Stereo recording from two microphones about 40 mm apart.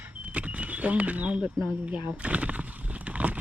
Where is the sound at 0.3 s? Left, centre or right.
Right.